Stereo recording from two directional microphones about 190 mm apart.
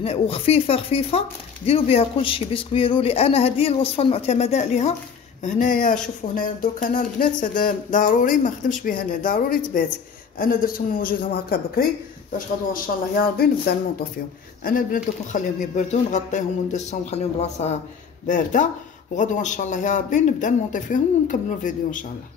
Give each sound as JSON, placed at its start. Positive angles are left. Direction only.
{"t": 0.0, "sound": "speech", "side_deg": 30}